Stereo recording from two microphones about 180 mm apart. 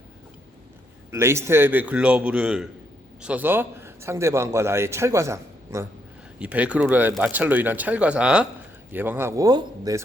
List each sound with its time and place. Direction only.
1.1 s a man's voice: 15° right (ahead or behind)